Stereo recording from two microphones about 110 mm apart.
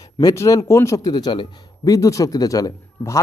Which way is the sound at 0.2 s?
30° left (ahead or behind).